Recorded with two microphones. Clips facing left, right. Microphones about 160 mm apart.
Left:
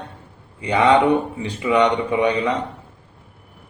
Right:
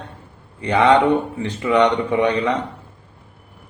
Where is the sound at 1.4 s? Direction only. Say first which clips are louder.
Right 1 dB; 10° left (ahead or behind).